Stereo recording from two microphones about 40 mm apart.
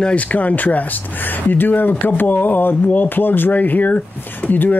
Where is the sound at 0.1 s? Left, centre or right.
Left.